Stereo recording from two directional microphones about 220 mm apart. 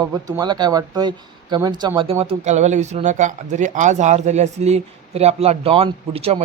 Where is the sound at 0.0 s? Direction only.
15° right (ahead or behind).